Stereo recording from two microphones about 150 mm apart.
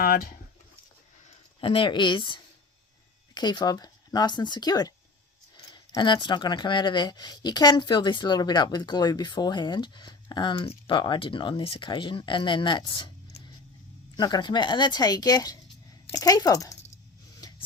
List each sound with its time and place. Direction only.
0.0 s speech: 85° left
1.3 s speech: 35° left (ahead or behind)